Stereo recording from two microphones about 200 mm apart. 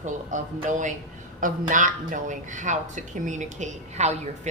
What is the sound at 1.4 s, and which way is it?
A woman's voice, 40° right (ahead or behind).